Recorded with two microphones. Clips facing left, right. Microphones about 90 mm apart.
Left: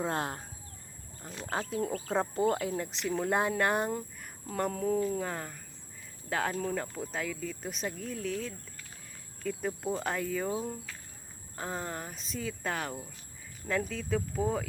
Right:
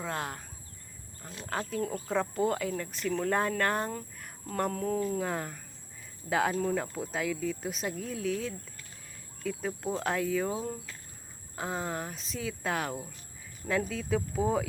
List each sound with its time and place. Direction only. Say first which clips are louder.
0.0 s speech: left 3 dB; 30° left (ahead or behind)
1.5 s speech: even; 25° left (ahead or behind)
4.2 s speech: right 5 dB; centre (ahead or behind)